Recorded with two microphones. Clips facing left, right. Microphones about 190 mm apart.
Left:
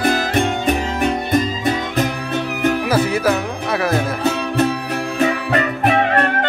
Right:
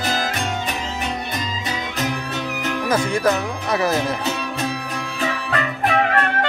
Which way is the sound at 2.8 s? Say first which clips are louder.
Right 2 dB; 5° left (ahead or behind).